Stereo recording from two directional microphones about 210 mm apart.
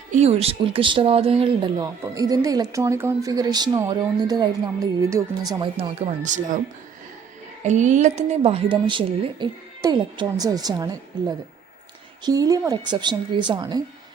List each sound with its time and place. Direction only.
0.1 s speech: 30° right (ahead or behind)
7.6 s speech: 35° right (ahead or behind)